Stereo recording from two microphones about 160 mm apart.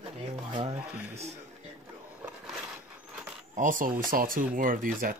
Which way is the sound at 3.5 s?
55° right (ahead or behind).